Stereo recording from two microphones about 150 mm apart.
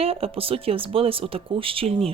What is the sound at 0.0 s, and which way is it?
Speech, 40° right (ahead or behind).